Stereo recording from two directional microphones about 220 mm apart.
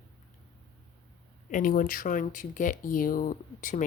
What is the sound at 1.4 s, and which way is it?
Speech, 35° left (ahead or behind).